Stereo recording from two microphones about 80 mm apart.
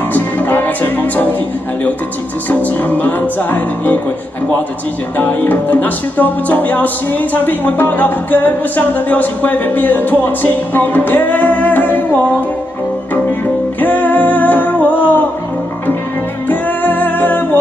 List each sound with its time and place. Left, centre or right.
0.1 s music: left
2.8 s music: left
5.1 s music: left
13.7 s music: left
16.4 s music: left